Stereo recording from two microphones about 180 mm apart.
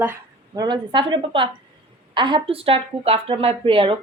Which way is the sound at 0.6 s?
25° right (ahead or behind).